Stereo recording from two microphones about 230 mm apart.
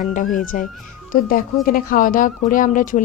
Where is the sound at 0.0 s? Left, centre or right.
Left.